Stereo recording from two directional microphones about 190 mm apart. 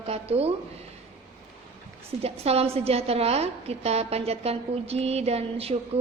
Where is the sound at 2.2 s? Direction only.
30° right (ahead or behind).